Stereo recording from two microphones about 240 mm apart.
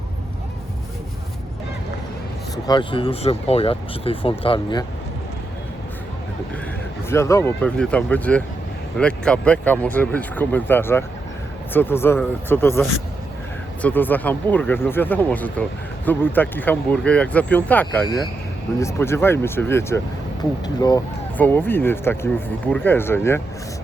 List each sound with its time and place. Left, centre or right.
2.6 s speech: centre
7.1 s speech: centre
13.8 s speech: centre